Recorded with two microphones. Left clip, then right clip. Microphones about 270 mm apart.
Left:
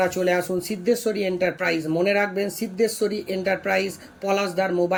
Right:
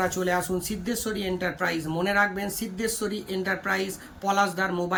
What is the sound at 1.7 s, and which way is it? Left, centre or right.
Speech, right.